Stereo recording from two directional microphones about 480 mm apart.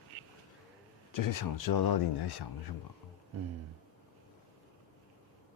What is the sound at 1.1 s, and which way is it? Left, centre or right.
Speech, left.